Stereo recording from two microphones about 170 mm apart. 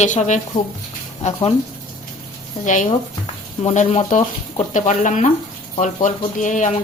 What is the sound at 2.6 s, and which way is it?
Speech, 50° left (ahead or behind).